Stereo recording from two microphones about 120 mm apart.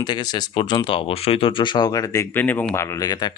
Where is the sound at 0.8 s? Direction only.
50° left (ahead or behind); by 2.2 s 30° left (ahead or behind).